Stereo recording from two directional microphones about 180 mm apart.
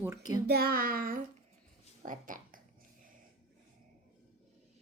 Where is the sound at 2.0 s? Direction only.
45° right (ahead or behind).